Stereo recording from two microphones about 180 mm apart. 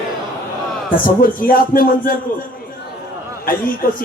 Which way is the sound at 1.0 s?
50° left (ahead or behind).